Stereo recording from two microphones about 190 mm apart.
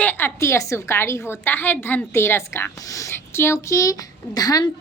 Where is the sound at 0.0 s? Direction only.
10° left (ahead or behind).